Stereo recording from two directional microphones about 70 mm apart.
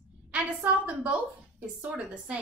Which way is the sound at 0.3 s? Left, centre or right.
Centre.